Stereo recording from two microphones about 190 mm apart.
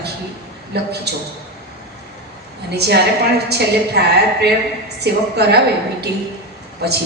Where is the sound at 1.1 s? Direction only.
60° right (ahead or behind).